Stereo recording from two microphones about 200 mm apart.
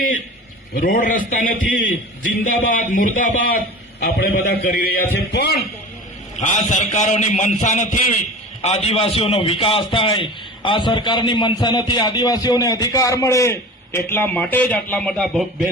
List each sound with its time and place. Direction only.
0.7 s a man's voice: 45° left (ahead or behind)
6.4 s a man's voice: 35° left (ahead or behind); by 15.4 s 5° left (ahead or behind)